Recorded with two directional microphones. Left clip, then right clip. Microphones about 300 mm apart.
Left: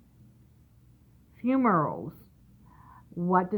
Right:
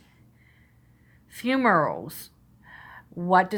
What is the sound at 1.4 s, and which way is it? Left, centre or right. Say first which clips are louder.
Speech: right 4 dB; centre.